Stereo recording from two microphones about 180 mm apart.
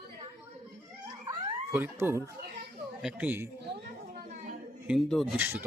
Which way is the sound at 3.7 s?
50° right (ahead or behind).